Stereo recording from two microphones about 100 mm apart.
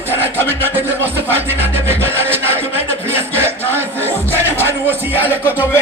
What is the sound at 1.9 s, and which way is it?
Rub, 25° right (ahead or behind).